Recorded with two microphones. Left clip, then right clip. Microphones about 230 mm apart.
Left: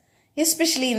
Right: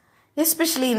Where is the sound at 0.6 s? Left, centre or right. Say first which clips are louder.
Left 2 dB; centre.